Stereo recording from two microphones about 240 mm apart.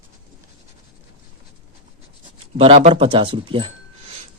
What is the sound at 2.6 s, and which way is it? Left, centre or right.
Speech, right.